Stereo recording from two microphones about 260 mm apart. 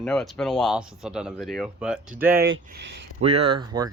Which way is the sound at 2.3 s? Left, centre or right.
Right.